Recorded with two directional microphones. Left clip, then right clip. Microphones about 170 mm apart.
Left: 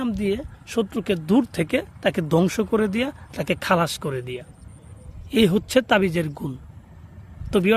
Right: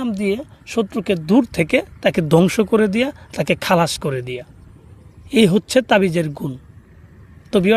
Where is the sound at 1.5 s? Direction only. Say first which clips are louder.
Right 6 dB; 35° right (ahead or behind).